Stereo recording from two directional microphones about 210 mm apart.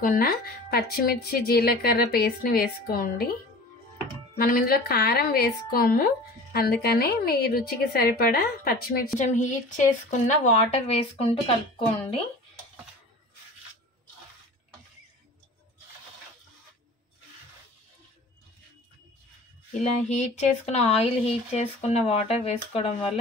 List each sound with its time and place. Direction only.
0.0 s a woman's voice: 40° left (ahead or behind)
4.4 s a woman's voice: 45° left (ahead or behind)
19.8 s speech: 35° left (ahead or behind)